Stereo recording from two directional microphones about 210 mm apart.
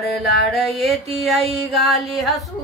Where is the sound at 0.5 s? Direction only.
Centre (ahead or behind).